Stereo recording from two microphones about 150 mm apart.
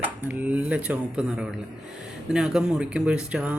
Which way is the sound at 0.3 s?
10° right (ahead or behind).